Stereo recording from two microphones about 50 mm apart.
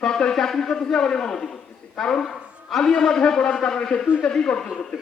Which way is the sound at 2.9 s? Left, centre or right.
Centre.